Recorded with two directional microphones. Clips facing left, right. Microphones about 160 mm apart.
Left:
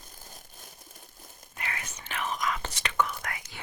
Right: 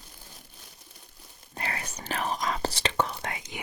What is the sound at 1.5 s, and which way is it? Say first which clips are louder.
Whispering: right 4 dB; 35° right (ahead or behind).